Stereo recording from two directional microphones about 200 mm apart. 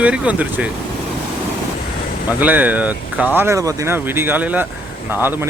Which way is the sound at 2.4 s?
5° right (ahead or behind).